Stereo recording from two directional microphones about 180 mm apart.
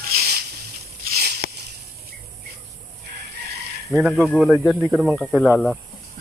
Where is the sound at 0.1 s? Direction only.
55° right (ahead or behind).